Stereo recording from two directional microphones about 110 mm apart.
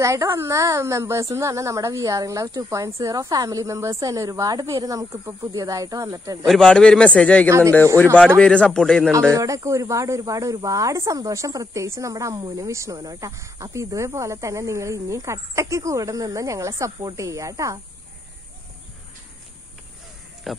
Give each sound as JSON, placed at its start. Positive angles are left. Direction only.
{"t": 0.0, "sound": "speech", "side_deg": -30}
{"t": 6.4, "sound": "a man's voice", "side_deg": 5}
{"t": 7.4, "sound": "speech", "side_deg": -25}
{"t": 8.4, "sound": "a man's voice", "side_deg": 10}
{"t": 9.3, "sound": "speech", "side_deg": -30}
{"t": 20.5, "sound": "speech", "side_deg": 0}